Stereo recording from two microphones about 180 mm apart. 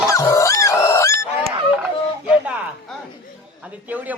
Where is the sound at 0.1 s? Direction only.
20° left (ahead or behind).